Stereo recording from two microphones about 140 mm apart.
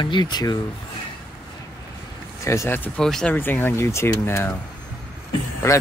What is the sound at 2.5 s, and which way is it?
Speech, 15° left (ahead or behind).